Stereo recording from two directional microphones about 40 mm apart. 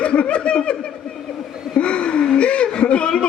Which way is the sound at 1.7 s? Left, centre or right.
Left.